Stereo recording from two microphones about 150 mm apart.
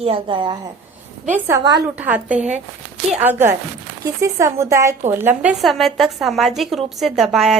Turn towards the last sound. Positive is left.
turn(degrees=0)  # may be behind; listen again after turning